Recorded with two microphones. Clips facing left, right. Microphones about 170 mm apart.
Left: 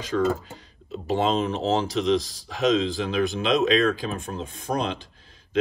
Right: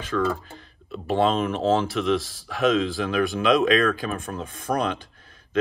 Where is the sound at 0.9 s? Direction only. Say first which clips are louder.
Right 1 dB; 20° left (ahead or behind).